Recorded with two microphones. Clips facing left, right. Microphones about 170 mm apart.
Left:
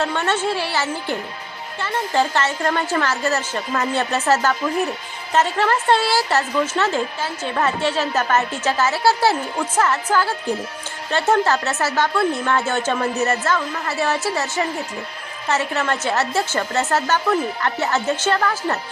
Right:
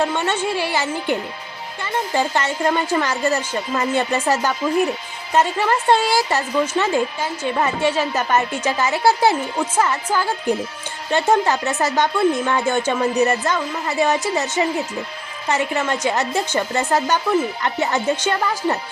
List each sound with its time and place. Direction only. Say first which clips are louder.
0.0 s speech: right 1 dB; 15° right (ahead or behind)